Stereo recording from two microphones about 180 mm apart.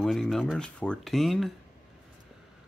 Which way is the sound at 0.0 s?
Centre (ahead or behind).